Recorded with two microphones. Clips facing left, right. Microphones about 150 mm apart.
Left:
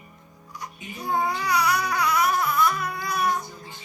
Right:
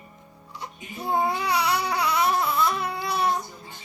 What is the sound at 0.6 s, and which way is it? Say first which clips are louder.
Babbling: right 1 dB; 25° right (ahead or behind).